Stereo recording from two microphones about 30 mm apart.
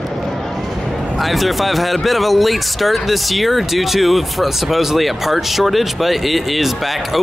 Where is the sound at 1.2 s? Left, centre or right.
Centre.